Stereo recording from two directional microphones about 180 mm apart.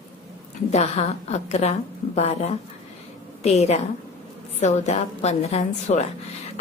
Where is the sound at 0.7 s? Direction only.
35° left (ahead or behind).